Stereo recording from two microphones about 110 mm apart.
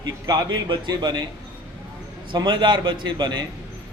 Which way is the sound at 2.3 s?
45° right (ahead or behind).